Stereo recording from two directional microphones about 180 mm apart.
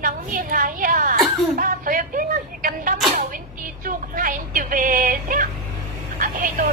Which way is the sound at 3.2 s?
50° right (ahead or behind).